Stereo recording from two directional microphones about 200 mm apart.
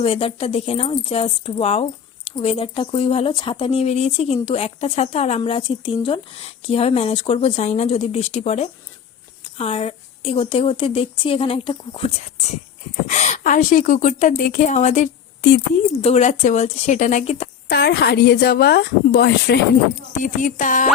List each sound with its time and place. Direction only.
0.0 s speech: 25° left (ahead or behind)
13.1 s a woman's voice: 35° left (ahead or behind)
15.4 s speech: 60° left (ahead or behind)
16.0 s a woman's voice: 30° left (ahead or behind)
17.7 s speech: 55° left (ahead or behind)
20.2 s a woman's voice: 40° left (ahead or behind)